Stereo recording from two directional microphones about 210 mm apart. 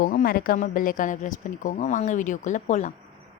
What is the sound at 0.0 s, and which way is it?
A woman's voice, 45° left (ahead or behind).